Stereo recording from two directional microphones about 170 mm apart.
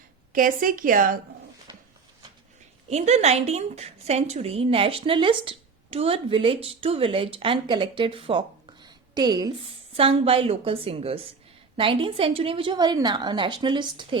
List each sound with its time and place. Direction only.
0.3 s a woman's voice: 55° right (ahead or behind)
2.9 s a woman's voice: 40° right (ahead or behind)